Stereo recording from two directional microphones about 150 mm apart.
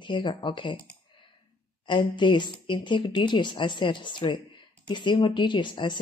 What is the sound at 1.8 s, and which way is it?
Speech, 30° left (ahead or behind).